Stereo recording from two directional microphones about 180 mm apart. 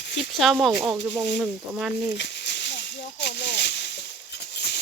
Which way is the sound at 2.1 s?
75° left (ahead or behind).